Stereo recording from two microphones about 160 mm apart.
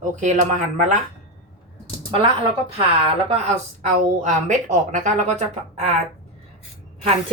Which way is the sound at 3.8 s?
50° right (ahead or behind).